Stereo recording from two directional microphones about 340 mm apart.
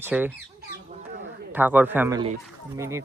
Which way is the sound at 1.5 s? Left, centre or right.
Centre.